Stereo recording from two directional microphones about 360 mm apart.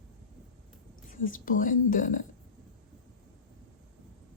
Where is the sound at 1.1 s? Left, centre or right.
Left.